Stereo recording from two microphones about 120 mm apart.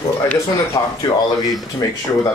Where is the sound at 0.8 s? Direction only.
30° left (ahead or behind).